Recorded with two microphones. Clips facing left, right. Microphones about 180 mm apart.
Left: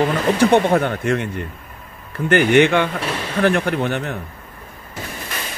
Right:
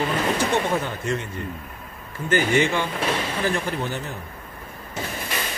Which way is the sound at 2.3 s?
65° left (ahead or behind).